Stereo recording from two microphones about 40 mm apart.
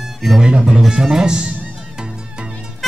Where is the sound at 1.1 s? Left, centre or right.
Centre.